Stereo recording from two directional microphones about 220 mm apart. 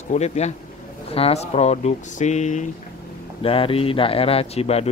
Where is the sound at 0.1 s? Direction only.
30° left (ahead or behind).